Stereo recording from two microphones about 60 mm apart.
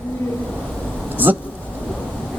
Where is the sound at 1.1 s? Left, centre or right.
Right.